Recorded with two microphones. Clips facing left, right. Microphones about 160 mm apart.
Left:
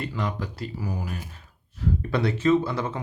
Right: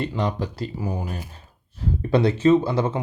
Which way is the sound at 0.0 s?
25° right (ahead or behind).